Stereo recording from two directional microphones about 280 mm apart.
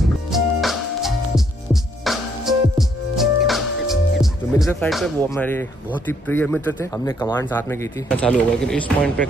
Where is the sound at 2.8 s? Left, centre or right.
Centre.